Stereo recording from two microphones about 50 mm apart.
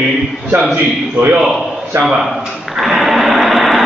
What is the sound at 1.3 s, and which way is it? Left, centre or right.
Speech, centre.